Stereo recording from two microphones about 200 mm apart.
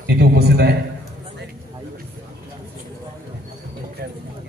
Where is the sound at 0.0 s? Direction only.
55° right (ahead or behind).